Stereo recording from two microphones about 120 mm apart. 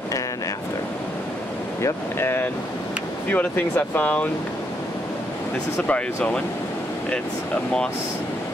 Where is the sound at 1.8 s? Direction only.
20° left (ahead or behind).